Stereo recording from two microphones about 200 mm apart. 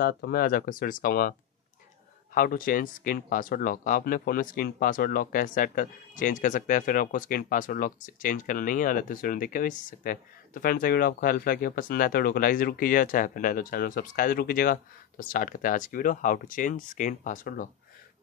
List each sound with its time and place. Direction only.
0.0 s speech: 50° left (ahead or behind)
2.3 s speech: 45° left (ahead or behind)